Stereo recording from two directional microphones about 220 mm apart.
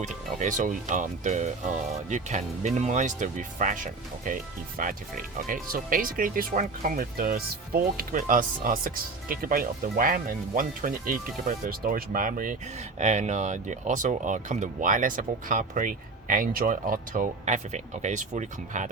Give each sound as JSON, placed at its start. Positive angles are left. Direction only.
{"t": 0.0, "sound": "speech", "side_deg": -35}